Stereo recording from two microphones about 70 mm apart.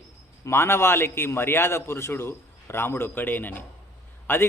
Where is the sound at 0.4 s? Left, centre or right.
Left.